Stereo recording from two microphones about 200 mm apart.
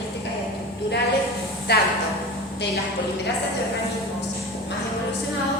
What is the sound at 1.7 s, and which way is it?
Speech, 55° left (ahead or behind).